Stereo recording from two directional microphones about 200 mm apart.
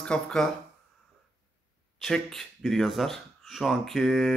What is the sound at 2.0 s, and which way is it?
Speech, centre (ahead or behind).